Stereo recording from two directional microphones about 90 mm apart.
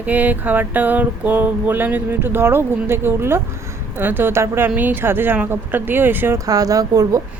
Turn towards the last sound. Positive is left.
turn(degrees=-40)  # may be behind; listen again after turning